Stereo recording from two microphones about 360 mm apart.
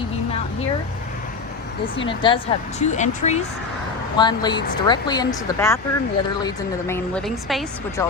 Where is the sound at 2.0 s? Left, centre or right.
Centre.